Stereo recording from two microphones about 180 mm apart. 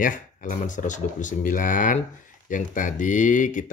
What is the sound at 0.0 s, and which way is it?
Speech, 45° left (ahead or behind).